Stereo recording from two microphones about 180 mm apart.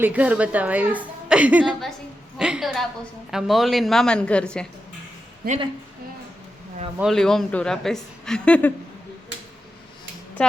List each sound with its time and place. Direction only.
0.0 s a woman's voice: 10° right (ahead or behind)
5.4 s a woman's voice: 60° right (ahead or behind)
7.0 s speech: centre (ahead or behind)